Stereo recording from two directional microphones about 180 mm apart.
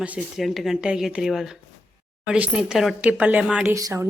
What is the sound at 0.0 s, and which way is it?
Speech, 5° right (ahead or behind).